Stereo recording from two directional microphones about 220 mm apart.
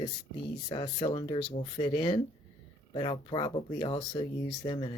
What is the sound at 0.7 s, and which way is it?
Speech, 20° left (ahead or behind).